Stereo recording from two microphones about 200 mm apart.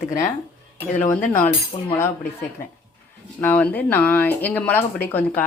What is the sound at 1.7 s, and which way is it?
Cutlery, 30° left (ahead or behind).